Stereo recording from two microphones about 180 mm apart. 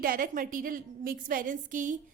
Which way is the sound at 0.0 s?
50° right (ahead or behind).